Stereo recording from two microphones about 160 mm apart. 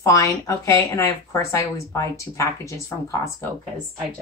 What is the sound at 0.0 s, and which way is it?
A woman's voice, 20° left (ahead or behind).